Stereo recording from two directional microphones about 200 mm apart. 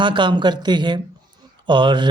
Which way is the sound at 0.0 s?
25° right (ahead or behind).